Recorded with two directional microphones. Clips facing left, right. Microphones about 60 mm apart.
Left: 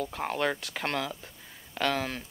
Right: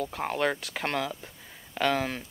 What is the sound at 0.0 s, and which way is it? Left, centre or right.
Speech, centre.